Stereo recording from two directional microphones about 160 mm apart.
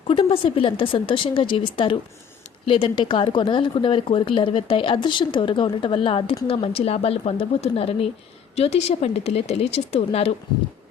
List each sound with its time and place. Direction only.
0.1 s a woman's voice: 30° left (ahead or behind)